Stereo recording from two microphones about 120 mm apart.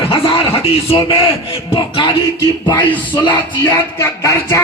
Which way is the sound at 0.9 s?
35° left (ahead or behind).